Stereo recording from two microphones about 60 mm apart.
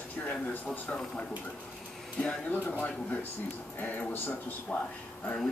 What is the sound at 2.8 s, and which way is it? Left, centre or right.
A man's voice, left.